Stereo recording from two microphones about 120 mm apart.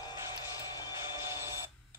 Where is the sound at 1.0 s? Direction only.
25° right (ahead or behind).